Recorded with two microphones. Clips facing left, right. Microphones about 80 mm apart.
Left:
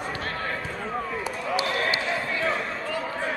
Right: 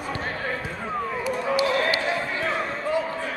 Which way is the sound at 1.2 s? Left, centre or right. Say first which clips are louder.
Right 7 dB; left.